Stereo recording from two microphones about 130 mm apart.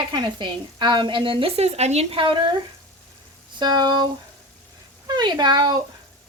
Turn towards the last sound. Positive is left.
turn(degrees=-35)  # may be behind; listen again after turning